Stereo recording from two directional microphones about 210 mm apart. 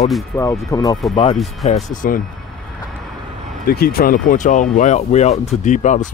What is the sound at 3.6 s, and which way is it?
Speech, 45° left (ahead or behind).